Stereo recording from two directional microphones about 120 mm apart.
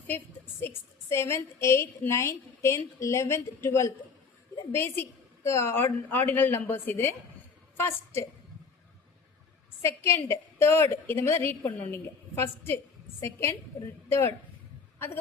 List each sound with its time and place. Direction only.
0.6 s a woman's voice: 20° left (ahead or behind)
9.8 s a woman's voice: 20° left (ahead or behind)